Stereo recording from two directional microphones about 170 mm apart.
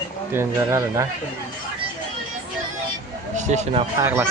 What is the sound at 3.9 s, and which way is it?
Speech, 15° right (ahead or behind).